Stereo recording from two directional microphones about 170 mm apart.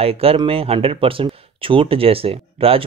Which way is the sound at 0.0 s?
35° right (ahead or behind).